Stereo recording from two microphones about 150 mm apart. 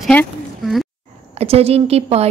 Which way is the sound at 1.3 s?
40° right (ahead or behind).